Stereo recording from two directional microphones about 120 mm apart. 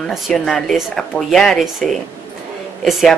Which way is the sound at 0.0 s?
5° left (ahead or behind).